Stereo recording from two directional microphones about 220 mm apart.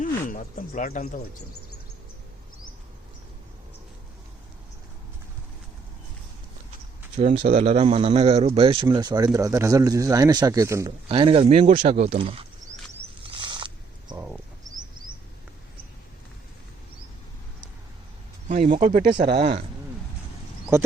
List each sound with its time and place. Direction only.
0.0 s speech: 40° left (ahead or behind)
7.3 s speech: 30° right (ahead or behind); by 10.9 s 15° right (ahead or behind)
11.1 s speech: 25° right (ahead or behind)
13.2 s a sound: 20° right (ahead or behind)
18.4 s speech: 35° right (ahead or behind)
19.1 s speech: 20° right (ahead or behind)